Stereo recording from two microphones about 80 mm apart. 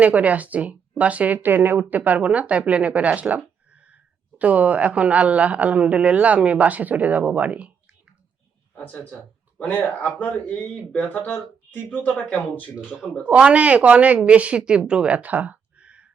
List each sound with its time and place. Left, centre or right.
0.0 s speech: centre
8.7 s speech: centre
13.3 s speech: centre